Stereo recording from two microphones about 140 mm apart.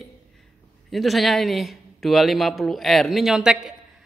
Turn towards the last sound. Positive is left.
turn(degrees=-5)  # may be behind; listen again after turning